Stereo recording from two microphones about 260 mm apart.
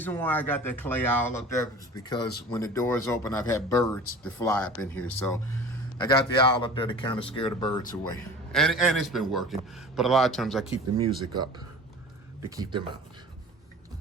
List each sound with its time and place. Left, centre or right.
0.0 s a man's voice: centre
6.0 s speech: centre
8.5 s a man's voice: centre
10.9 s speech: centre
12.5 s speech: centre